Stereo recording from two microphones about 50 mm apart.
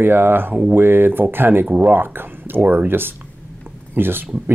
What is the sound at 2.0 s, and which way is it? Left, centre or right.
Speech, right.